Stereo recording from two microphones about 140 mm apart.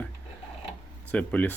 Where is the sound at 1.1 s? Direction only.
10° left (ahead or behind).